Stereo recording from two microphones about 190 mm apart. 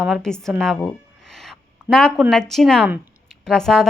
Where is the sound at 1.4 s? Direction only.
5° left (ahead or behind).